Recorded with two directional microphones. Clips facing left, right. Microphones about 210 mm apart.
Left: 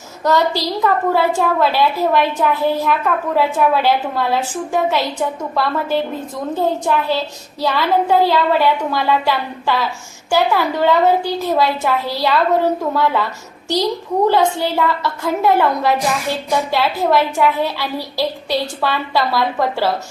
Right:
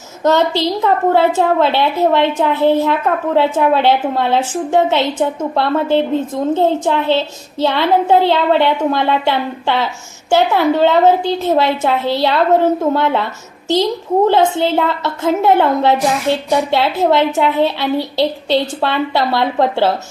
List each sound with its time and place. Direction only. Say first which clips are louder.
0.3 s a woman's voice: right 3 dB; 20° right (ahead or behind)
14.3 s a woman's voice: right 1 dB; 25° right (ahead or behind)